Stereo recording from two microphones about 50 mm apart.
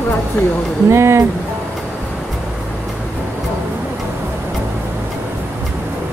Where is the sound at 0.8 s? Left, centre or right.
Right.